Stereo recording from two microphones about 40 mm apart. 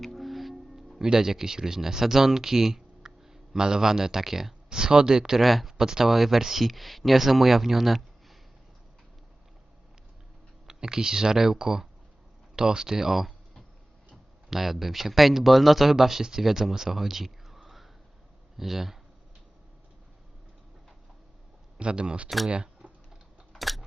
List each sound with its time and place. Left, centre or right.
0.0 s music: centre
0.9 s speech: centre
4.7 s speech: centre
5.4 s speech: centre
5.7 s speech: centre
10.7 s speech: centre
14.5 s speech: centre
21.8 s speech: right
22.4 s a sound: right
23.6 s a sound: centre